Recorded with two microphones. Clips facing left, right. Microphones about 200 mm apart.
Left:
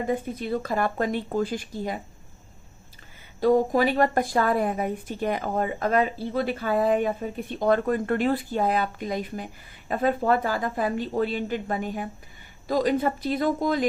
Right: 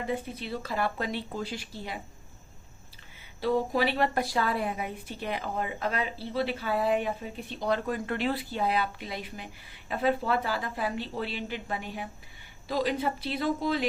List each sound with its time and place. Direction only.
0.1 s a woman's voice: 50° left (ahead or behind)
3.4 s a woman's voice: 45° left (ahead or behind)